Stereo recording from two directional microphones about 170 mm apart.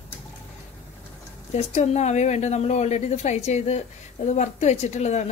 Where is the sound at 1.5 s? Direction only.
40° left (ahead or behind).